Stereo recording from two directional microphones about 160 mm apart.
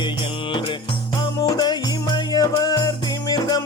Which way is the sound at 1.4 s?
25° left (ahead or behind).